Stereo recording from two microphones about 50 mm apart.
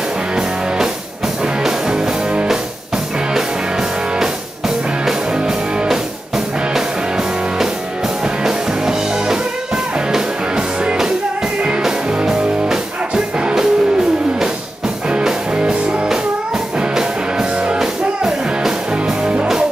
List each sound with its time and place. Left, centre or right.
1.6 s music: centre
4.2 s music: centre
5.9 s music: centre
15.0 s music: centre